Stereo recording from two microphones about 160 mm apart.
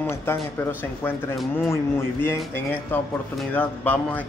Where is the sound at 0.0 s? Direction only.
15° left (ahead or behind).